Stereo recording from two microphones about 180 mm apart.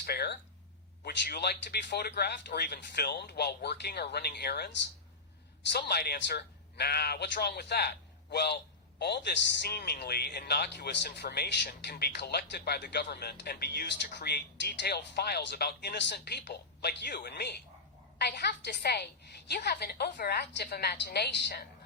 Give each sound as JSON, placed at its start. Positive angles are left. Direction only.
{"t": 0.0, "sound": "a man's voice", "side_deg": 65}
{"t": 5.7, "sound": "a man's voice", "side_deg": 60}